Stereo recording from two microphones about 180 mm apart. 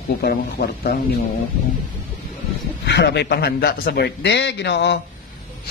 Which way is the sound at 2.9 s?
70° left (ahead or behind).